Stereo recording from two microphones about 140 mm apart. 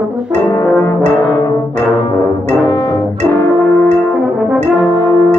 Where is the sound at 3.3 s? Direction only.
20° left (ahead or behind).